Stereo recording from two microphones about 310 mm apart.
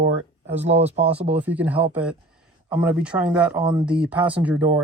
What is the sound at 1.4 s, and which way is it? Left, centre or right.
Speech, centre.